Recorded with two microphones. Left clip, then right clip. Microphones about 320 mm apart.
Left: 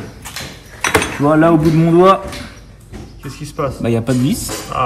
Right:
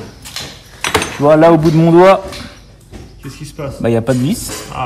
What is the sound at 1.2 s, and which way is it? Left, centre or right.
Speech, right.